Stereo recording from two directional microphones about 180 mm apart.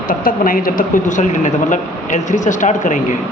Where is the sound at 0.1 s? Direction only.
50° left (ahead or behind).